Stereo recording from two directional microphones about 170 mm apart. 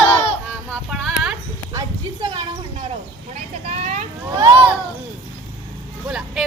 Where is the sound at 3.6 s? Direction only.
40° right (ahead or behind).